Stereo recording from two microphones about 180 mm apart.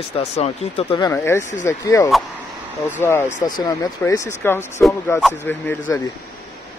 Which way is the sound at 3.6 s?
15° left (ahead or behind).